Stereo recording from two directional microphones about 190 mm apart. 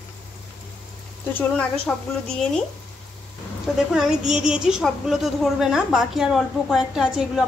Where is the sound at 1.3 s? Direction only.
5° left (ahead or behind).